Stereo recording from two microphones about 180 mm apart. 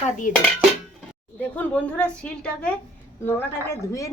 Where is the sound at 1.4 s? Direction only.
10° left (ahead or behind).